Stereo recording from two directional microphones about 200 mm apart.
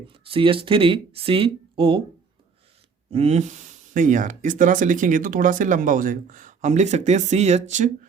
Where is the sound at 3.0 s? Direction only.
30° right (ahead or behind).